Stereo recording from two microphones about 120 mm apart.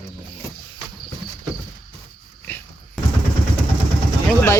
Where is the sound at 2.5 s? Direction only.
20° left (ahead or behind).